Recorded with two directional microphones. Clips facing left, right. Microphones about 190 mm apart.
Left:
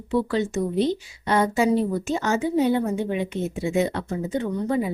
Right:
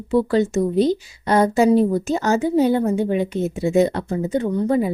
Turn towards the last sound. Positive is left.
turn(degrees=-40)  # may be behind; listen again after turning